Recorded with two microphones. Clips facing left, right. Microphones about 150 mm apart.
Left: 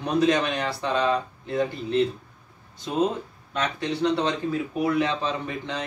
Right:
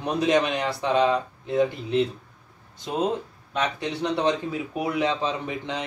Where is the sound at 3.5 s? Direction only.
15° right (ahead or behind).